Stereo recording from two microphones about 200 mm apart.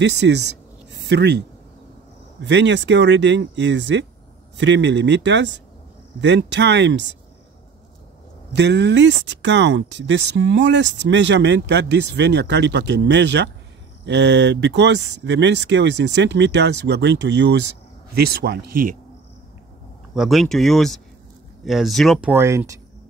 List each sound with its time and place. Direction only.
0.0 s speech: 60° right (ahead or behind)
2.4 s speech: 60° right (ahead or behind)
8.5 s a man's voice: 60° right (ahead or behind)
20.2 s speech: centre (ahead or behind)
22.3 s speech: 10° right (ahead or behind)